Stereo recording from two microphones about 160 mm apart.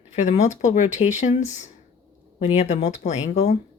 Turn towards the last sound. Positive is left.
turn(degrees=40)  # may be behind; listen again after turning